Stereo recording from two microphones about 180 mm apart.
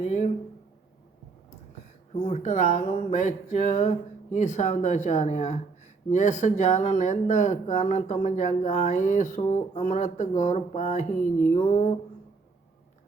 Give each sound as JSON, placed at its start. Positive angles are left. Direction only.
{"t": 0.0, "sound": "speech", "side_deg": 40}
{"t": 2.2, "sound": "speech", "side_deg": 40}